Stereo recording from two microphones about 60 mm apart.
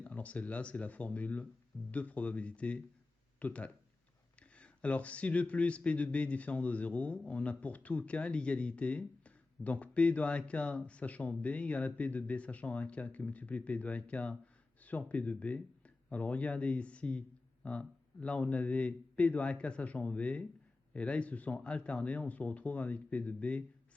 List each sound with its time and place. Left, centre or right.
0.0 s speech: left